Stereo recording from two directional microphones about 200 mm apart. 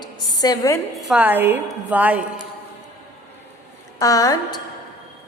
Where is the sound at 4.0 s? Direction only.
15° left (ahead or behind).